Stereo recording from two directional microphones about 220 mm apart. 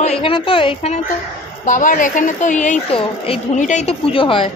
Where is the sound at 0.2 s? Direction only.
25° left (ahead or behind).